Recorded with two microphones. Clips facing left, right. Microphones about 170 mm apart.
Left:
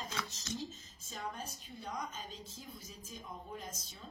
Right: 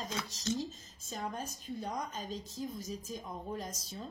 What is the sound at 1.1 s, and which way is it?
A woman's voice, 45° right (ahead or behind).